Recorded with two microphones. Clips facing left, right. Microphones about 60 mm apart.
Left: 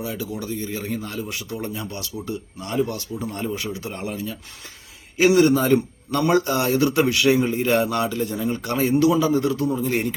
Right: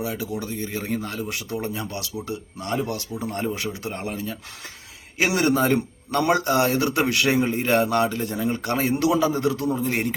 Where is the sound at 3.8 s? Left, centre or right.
Right.